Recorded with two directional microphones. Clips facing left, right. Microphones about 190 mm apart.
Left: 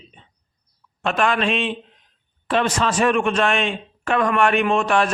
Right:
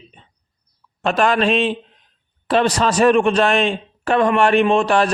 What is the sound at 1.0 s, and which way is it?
A man's voice, 35° right (ahead or behind).